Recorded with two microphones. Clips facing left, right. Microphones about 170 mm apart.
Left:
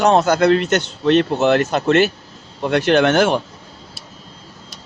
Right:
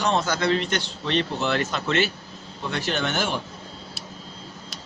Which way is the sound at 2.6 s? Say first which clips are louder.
Left 12 dB; 75° left (ahead or behind).